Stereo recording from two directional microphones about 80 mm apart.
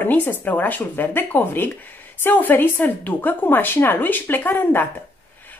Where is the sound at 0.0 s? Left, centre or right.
Left.